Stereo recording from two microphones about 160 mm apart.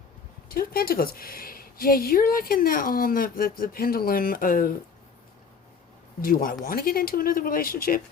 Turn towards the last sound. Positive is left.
turn(degrees=65)  # may be behind; listen again after turning